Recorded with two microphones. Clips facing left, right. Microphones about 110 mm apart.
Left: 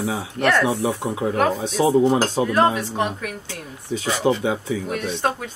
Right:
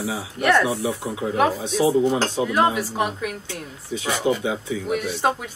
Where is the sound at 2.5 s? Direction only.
5° right (ahead or behind).